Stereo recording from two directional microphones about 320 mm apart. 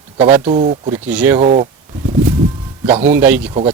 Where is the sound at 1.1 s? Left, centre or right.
Centre.